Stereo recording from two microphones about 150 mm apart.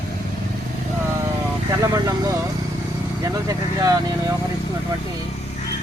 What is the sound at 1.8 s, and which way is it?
Speech, 25° right (ahead or behind).